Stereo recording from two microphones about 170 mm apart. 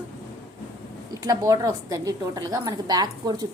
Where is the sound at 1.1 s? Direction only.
20° right (ahead or behind).